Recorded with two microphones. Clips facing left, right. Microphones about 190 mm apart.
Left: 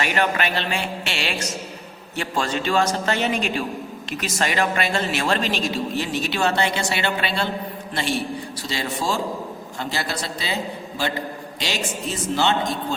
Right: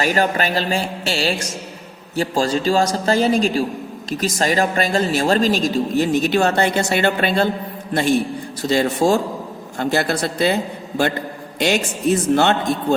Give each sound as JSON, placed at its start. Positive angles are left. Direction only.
{"t": 0.0, "sound": "a man's voice", "side_deg": -40}